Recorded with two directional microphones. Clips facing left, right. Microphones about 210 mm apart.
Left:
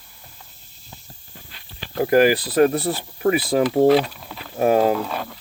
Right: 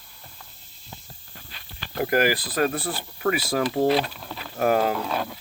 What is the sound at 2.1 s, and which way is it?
Speech, 25° left (ahead or behind).